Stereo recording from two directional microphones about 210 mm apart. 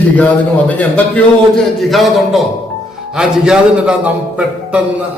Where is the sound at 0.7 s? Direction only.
5° left (ahead or behind).